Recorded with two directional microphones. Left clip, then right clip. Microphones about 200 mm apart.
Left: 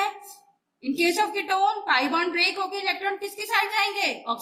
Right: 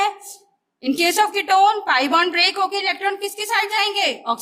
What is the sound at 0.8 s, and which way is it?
A woman's voice, 45° right (ahead or behind).